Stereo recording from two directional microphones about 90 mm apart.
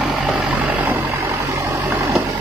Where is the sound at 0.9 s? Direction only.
25° right (ahead or behind).